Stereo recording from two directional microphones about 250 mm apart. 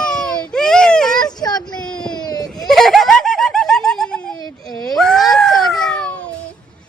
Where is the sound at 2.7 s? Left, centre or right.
Centre.